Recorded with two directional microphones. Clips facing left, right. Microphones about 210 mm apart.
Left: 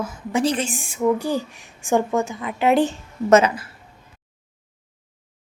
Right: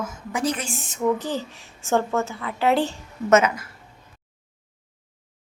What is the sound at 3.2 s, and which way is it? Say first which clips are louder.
Speech: left 3 dB; 35° left (ahead or behind).